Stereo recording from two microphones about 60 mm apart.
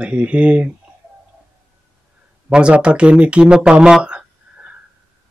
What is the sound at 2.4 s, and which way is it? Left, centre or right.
Speech, centre.